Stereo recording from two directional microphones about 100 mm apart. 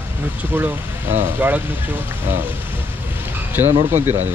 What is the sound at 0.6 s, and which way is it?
Speech, 20° right (ahead or behind).